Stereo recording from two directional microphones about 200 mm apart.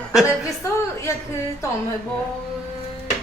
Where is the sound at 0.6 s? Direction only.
15° left (ahead or behind).